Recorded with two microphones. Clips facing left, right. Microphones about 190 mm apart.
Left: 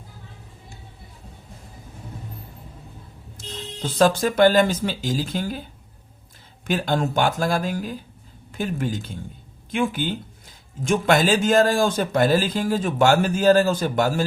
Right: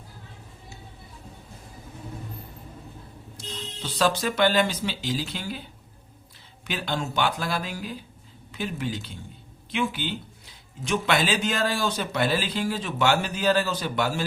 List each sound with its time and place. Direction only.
3.3 s speech: 50° left (ahead or behind)
6.7 s a man's voice: 45° left (ahead or behind)